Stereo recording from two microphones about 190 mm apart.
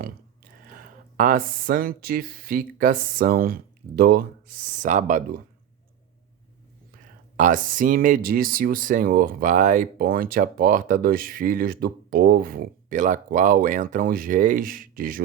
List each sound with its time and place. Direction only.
0.8 s speech: 45° right (ahead or behind)
7.3 s speech: 45° right (ahead or behind)